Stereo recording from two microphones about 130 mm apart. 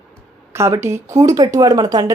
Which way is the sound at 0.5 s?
20° right (ahead or behind).